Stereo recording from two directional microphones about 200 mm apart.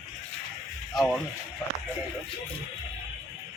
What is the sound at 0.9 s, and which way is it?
Speech, centre (ahead or behind).